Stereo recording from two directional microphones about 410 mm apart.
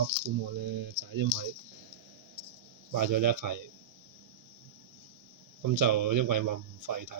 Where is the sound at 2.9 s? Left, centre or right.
Right.